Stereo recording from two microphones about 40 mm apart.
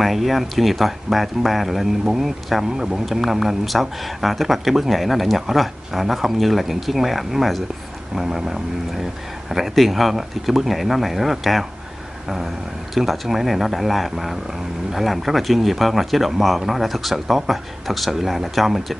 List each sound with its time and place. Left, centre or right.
0.0 s speech: centre
2.7 s speech: centre
3.1 s speech: centre
8.2 s speech: centre
12.9 s speech: centre